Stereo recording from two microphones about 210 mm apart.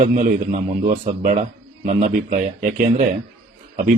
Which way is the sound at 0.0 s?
35° right (ahead or behind).